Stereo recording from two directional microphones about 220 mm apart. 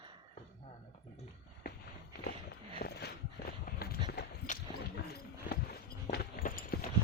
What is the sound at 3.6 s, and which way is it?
Run, 45° left (ahead or behind).